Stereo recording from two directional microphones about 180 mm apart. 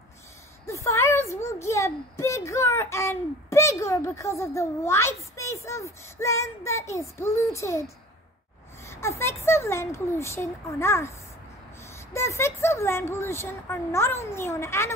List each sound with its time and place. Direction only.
0.7 s a child's voice: 15° left (ahead or behind)
8.8 s a sound: 15° left (ahead or behind)
9.2 s speech: 15° left (ahead or behind)